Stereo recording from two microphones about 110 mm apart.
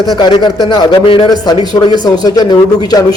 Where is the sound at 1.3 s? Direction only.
40° left (ahead or behind).